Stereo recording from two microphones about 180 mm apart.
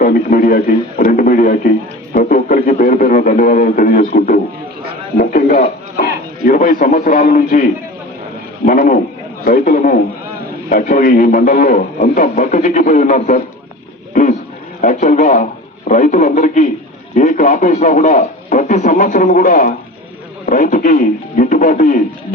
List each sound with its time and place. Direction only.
0.0 s a man's voice: 50° left (ahead or behind)